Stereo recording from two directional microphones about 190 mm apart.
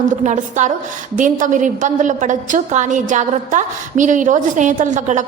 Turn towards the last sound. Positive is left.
turn(degrees=-40)  # may be behind; listen again after turning